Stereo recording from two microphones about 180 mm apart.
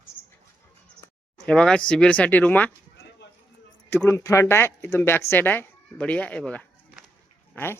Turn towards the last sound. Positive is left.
turn(degrees=10)  # may be behind; listen again after turning